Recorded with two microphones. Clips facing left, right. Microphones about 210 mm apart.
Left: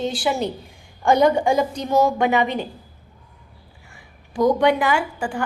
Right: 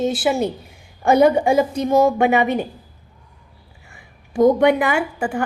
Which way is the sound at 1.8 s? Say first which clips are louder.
Right 3 dB; 20° right (ahead or behind).